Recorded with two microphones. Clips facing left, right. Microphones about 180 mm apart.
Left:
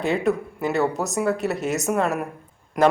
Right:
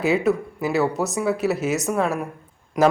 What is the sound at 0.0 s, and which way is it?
A man's voice, 5° right (ahead or behind).